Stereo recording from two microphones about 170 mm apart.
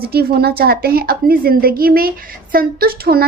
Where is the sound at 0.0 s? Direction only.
65° right (ahead or behind).